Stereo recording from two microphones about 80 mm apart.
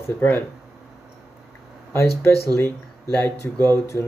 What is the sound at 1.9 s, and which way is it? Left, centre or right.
Speech, left.